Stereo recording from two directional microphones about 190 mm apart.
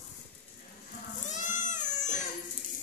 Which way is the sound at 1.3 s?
40° left (ahead or behind).